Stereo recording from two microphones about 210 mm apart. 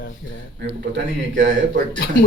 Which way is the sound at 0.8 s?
60° right (ahead or behind).